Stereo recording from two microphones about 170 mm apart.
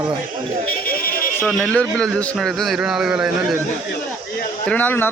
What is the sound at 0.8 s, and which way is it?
Music, 60° left (ahead or behind).